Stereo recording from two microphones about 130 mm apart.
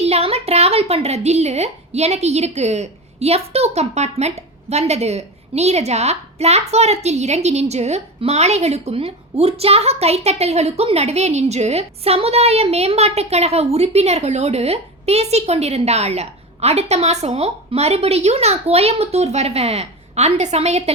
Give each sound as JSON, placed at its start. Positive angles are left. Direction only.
{"t": 0.0, "sound": "speech", "side_deg": -50}